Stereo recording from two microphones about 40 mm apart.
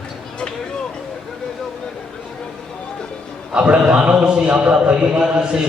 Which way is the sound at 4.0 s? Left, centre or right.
Right.